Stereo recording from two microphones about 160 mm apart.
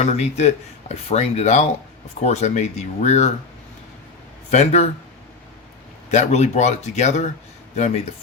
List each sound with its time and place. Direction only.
0.0 s speech: 45° left (ahead or behind)
4.5 s speech: 40° left (ahead or behind)
6.1 s speech: 45° left (ahead or behind)